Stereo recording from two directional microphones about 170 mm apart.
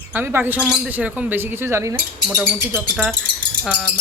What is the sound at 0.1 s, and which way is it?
Speech, 10° right (ahead or behind).